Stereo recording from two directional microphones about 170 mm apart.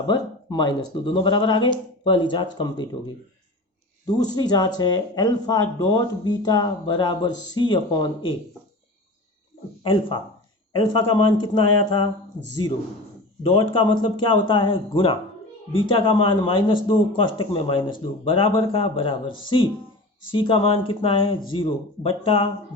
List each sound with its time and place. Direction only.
0.1 s speech: 25° left (ahead or behind)
4.0 s speech: 25° left (ahead or behind)
9.8 s speech: 30° left (ahead or behind)
13.7 s speech: 25° left (ahead or behind)